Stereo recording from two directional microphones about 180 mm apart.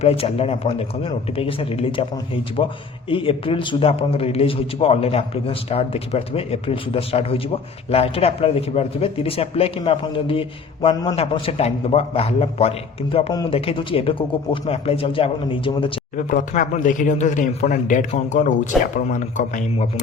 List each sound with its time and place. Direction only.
0.0 s a man's voice: 35° left (ahead or behind)
16.1 s speech: 45° left (ahead or behind)